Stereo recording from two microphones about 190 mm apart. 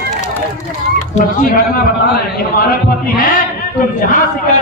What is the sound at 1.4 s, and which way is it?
A man's voice, 50° left (ahead or behind).